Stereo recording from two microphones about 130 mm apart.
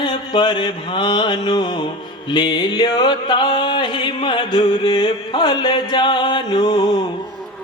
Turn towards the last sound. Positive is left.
turn(degrees=30)  # may be behind; listen again after turning